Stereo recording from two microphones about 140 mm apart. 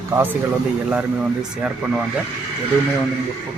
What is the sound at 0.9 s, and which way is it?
Speech, 5° right (ahead or behind).